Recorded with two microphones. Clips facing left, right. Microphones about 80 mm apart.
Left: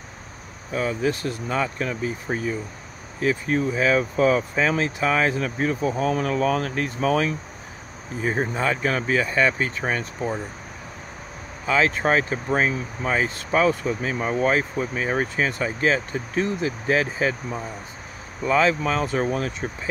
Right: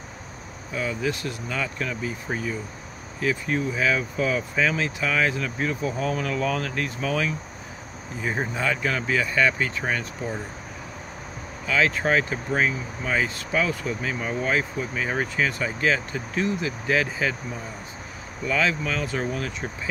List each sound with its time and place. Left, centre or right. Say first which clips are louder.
0.7 s speech: left 3 dB; left
3.2 s speech: left 3 dB; left
8.5 s speech: left 2 dB; left
11.6 s speech: left 2 dB; left
18.4 s speech: left 5 dB; left